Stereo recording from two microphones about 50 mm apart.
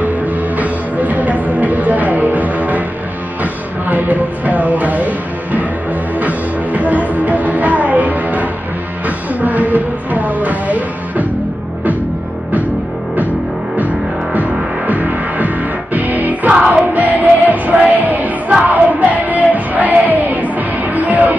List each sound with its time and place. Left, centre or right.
0.6 s music: right
3.8 s speech: right
6.1 s music: right
13.7 s music: right
16.5 s music: centre
16.9 s music: right